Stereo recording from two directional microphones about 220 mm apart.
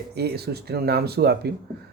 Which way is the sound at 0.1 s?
45° right (ahead or behind).